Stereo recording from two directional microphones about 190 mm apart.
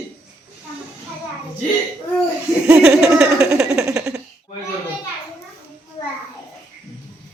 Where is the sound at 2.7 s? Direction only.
5° right (ahead or behind).